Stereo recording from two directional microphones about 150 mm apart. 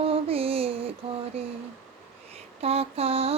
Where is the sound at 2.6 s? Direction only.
40° right (ahead or behind).